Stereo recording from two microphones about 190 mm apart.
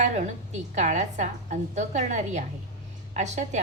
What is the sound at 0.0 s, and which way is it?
A woman's voice, 40° right (ahead or behind).